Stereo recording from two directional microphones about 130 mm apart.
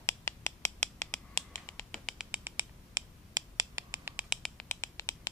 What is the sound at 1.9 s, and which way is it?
Finger snapping, centre (ahead or behind).